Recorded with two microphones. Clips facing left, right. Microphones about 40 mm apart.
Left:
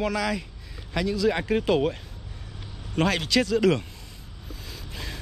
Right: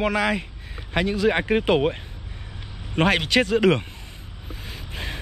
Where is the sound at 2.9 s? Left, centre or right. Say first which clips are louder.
Right 4 dB; right.